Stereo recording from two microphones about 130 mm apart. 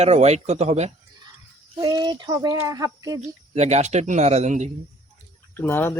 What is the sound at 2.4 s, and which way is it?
Speech, 25° right (ahead or behind).